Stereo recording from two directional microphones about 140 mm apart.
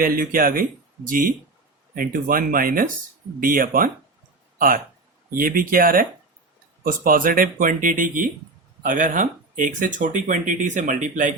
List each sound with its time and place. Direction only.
0.0 s speech: 90° right; by 11.3 s 65° right (ahead or behind)